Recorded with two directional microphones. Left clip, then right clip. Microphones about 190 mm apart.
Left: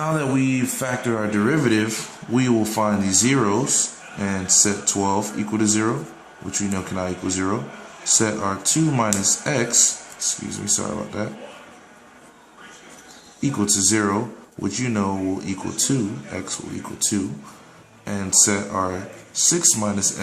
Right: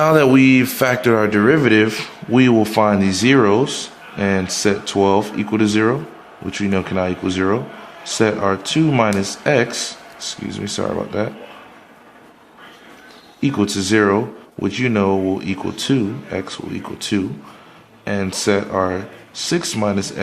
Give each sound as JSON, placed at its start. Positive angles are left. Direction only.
{"t": 0.0, "sound": "speech", "side_deg": -45}
{"t": 13.4, "sound": "speech", "side_deg": -30}
{"t": 18.0, "sound": "speech", "side_deg": -30}